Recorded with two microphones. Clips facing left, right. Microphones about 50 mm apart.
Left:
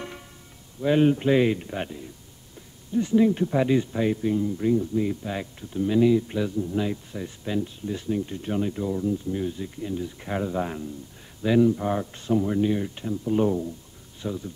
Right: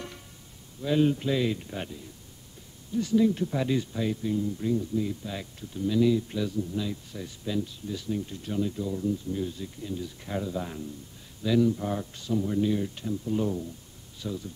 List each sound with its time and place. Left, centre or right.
0.7 s speech: left